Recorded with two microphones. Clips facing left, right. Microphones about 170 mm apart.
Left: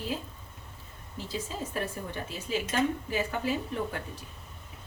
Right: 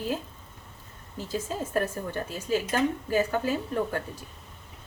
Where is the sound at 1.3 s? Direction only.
45° right (ahead or behind).